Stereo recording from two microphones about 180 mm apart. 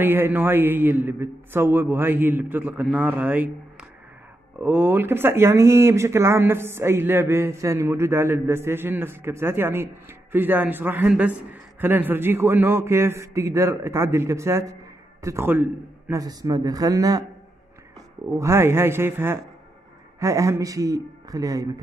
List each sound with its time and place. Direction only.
0.0 s speech: 10° right (ahead or behind)
4.6 s a man's voice: 10° right (ahead or behind)
18.3 s a man's voice: 15° right (ahead or behind)